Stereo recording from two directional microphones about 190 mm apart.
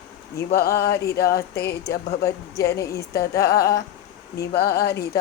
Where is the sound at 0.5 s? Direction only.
55° left (ahead or behind).